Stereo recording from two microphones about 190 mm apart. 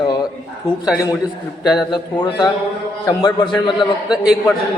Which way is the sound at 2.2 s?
20° left (ahead or behind).